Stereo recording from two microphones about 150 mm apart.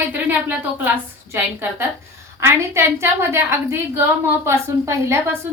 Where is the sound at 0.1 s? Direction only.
15° right (ahead or behind).